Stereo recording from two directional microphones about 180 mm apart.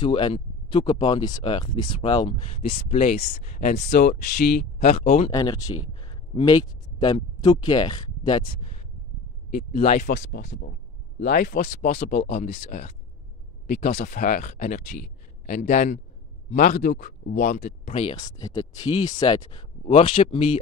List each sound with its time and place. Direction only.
0.0 s speech: 30° left (ahead or behind); by 4.6 s 50° left (ahead or behind)
4.7 s speech: 40° left (ahead or behind)
5.3 s speech: 20° left (ahead or behind)
9.5 s speech: 50° left (ahead or behind)
10.2 s speech: 90° left
11.1 s speech: 55° left (ahead or behind)
17.9 s speech: 25° left (ahead or behind)